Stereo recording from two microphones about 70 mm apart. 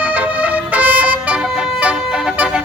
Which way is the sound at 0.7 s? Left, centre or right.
Right.